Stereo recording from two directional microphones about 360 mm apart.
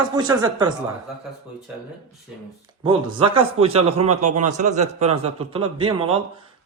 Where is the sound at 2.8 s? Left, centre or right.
Centre.